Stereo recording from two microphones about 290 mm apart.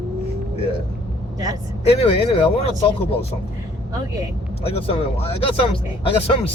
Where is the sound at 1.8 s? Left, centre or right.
Centre.